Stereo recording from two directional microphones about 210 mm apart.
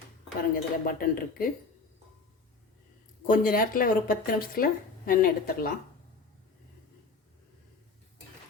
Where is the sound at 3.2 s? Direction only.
40° left (ahead or behind).